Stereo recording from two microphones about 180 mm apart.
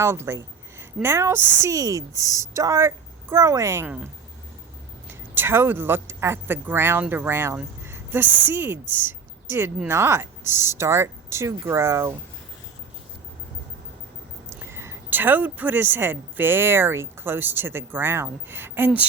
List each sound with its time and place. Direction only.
0.0 s a woman's voice: 15° right (ahead or behind)
1.4 s a woman's voice: 45° left (ahead or behind)
1.6 s a woman's voice: 20° right (ahead or behind)
14.7 s a woman's voice: 15° right (ahead or behind)